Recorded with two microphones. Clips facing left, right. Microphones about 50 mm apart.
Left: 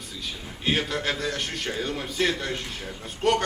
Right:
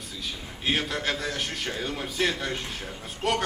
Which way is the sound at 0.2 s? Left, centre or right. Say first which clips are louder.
Even; centre.